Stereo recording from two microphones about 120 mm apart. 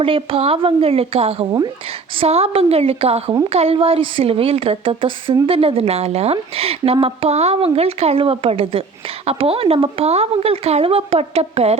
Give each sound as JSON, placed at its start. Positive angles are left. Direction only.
{"t": 0.0, "sound": "a woman's voice", "side_deg": -50}